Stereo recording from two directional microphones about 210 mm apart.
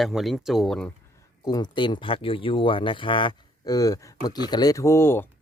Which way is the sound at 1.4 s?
20° left (ahead or behind).